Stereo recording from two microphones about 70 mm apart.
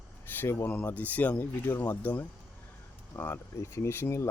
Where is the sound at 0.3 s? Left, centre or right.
Left.